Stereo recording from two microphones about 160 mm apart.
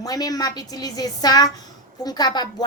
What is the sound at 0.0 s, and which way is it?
A woman's voice, 25° left (ahead or behind).